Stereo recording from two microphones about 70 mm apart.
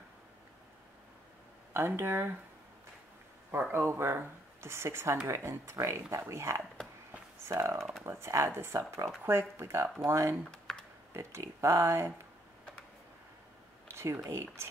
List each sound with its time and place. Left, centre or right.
1.7 s speech: right
3.7 s speech: right
10.5 s a sound: centre
11.1 s speech: right
13.8 s speech: right